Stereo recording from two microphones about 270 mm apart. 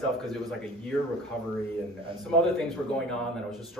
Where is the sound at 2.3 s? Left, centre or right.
Centre.